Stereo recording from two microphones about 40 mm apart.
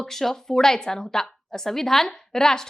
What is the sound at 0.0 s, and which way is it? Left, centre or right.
A woman's voice, centre.